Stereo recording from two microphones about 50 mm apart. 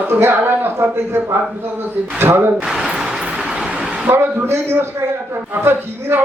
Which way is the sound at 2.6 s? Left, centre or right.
Centre.